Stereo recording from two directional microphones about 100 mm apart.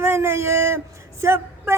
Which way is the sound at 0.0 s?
25° right (ahead or behind).